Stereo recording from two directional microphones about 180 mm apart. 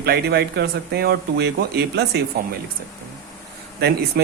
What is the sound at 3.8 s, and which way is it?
Speech, 60° right (ahead or behind).